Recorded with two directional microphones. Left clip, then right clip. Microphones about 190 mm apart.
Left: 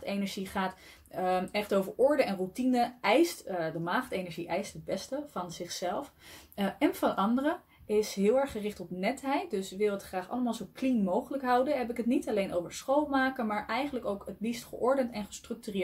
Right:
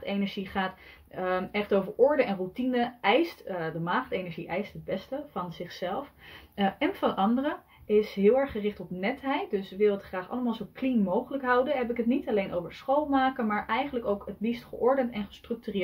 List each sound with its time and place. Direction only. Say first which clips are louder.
0.0 s speech: right 3 dB; 5° left (ahead or behind)